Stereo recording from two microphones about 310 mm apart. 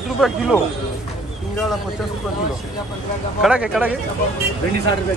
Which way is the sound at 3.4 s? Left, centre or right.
Centre.